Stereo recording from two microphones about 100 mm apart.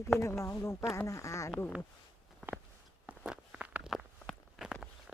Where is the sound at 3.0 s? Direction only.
10° right (ahead or behind).